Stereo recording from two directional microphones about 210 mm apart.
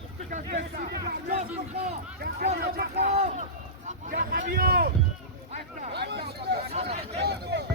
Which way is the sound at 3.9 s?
40° right (ahead or behind).